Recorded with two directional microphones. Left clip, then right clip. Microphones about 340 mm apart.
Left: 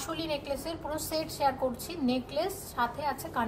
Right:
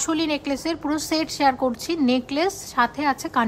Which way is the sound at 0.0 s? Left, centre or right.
Centre.